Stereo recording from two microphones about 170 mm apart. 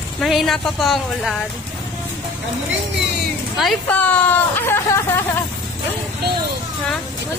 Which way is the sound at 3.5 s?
5° left (ahead or behind).